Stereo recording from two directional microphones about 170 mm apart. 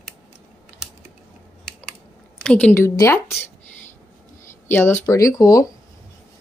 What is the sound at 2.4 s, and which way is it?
Speech, 5° left (ahead or behind).